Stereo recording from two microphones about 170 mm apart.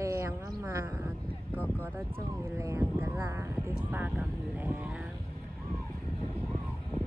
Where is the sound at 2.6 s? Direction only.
15° right (ahead or behind).